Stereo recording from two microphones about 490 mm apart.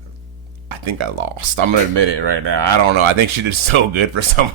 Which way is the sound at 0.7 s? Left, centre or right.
Right.